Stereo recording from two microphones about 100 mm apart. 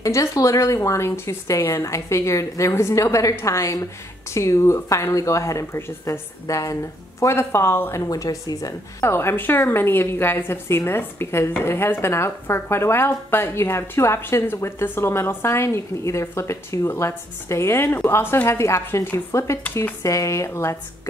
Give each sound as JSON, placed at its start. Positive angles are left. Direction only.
{"t": 0.0, "sound": "speech", "side_deg": 30}
{"t": 9.0, "sound": "a woman's voice", "side_deg": 25}